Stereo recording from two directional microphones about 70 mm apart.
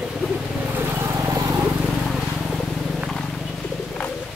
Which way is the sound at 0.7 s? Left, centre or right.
Right.